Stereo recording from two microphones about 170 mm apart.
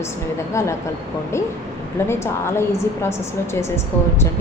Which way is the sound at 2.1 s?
15° left (ahead or behind).